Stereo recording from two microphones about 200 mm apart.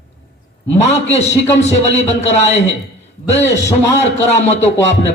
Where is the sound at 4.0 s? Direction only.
35° left (ahead or behind).